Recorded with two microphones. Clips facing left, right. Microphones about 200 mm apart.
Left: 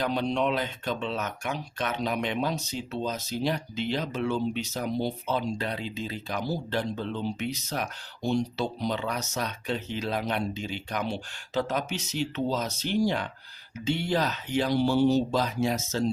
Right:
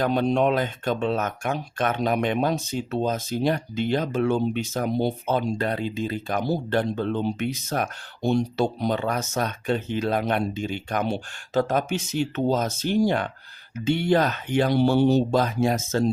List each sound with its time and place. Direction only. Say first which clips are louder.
0.0 s speech: right 6 dB; 50° right (ahead or behind)